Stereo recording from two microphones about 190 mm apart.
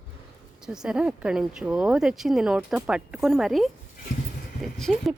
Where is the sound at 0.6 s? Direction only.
5° right (ahead or behind).